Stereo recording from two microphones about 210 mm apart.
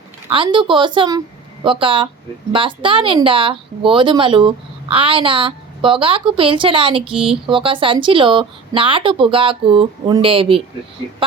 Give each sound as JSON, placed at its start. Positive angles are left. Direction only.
{"t": 0.3, "sound": "speech", "side_deg": -25}